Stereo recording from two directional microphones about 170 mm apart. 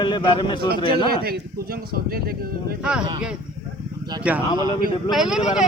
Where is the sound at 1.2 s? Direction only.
60° right (ahead or behind).